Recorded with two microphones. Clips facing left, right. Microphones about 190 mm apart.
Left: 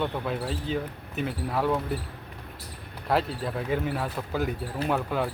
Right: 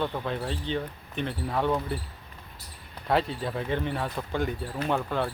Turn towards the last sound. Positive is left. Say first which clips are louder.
# left 1 dB
turn(degrees=5)  # may be behind; listen again after turning